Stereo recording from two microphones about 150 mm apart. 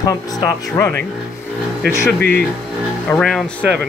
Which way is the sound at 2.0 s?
10° left (ahead or behind).